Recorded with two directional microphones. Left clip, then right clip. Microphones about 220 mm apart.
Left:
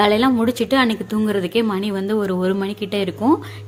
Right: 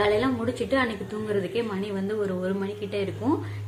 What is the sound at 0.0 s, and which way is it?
A woman's voice, 50° left (ahead or behind).